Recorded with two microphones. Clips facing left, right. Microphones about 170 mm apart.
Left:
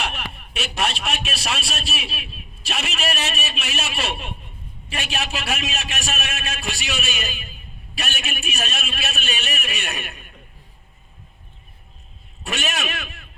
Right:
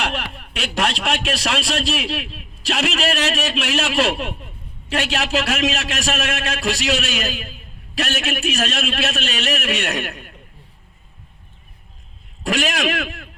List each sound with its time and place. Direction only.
0.0 s a man's voice: 90° right
12.4 s a man's voice: 90° right